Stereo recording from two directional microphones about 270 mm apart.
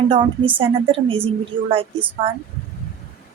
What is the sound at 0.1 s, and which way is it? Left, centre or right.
A woman's voice, centre.